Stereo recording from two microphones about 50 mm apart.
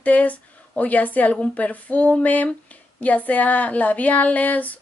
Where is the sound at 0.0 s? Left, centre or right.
Left.